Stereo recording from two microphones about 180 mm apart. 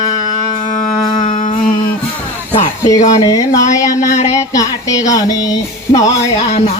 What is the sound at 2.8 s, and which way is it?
Speech, 20° left (ahead or behind).